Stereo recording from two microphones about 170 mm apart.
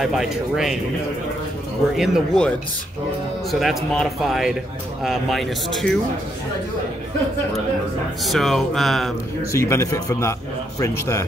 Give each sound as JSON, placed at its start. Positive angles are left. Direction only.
{"t": 0.0, "sound": "speech", "side_deg": 0}
{"t": 2.0, "sound": "speech", "side_deg": 0}
{"t": 3.5, "sound": "speech", "side_deg": 0}
{"t": 8.2, "sound": "speech", "side_deg": 0}
{"t": 9.5, "sound": "a man's voice", "side_deg": 15}